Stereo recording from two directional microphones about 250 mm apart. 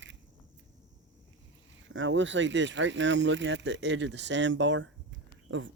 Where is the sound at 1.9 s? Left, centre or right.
Right.